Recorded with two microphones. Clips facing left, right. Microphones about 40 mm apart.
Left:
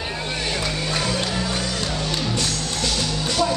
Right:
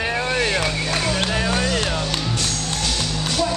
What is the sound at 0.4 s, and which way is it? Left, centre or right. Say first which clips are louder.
Vehicle: right 4 dB; right.